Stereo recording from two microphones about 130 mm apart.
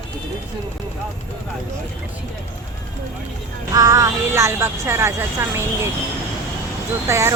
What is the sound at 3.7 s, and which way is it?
Speech, 30° right (ahead or behind).